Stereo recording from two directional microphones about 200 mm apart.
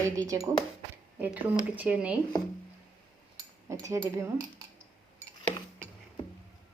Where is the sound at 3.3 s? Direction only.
15° right (ahead or behind).